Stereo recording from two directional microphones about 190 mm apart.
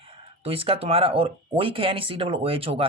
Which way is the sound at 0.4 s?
30° right (ahead or behind).